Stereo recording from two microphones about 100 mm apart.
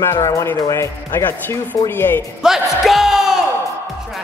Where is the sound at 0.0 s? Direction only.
30° left (ahead or behind).